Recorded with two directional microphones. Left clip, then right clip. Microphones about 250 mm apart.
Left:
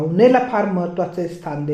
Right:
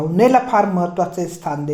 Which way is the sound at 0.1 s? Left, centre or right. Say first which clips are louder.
Even; right.